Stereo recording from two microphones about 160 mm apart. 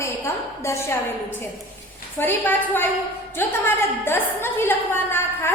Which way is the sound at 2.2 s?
10° left (ahead or behind).